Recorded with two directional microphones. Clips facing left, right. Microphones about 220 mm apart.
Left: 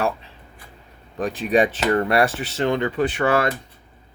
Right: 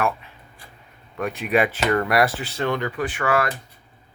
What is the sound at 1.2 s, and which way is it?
Speech, 30° left (ahead or behind).